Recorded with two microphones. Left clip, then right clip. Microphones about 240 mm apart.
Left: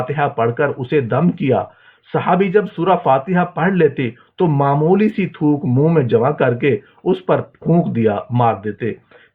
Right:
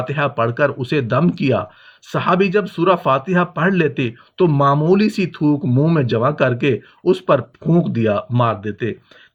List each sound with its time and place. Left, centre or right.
0.1 s speech: right